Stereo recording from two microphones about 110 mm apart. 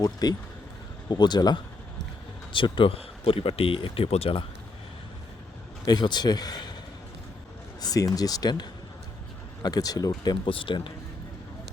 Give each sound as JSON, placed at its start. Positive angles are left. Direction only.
{"t": 0.0, "sound": "speech", "side_deg": 35}
{"t": 5.8, "sound": "speech", "side_deg": 40}
{"t": 7.8, "sound": "speech", "side_deg": 35}
{"t": 9.6, "sound": "speech", "side_deg": 35}
{"t": 10.4, "sound": "speech", "side_deg": 50}